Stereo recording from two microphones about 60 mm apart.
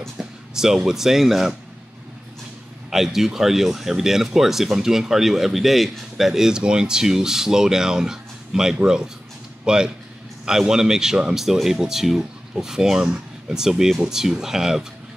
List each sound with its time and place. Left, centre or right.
0.2 s speech: centre
2.9 s speech: centre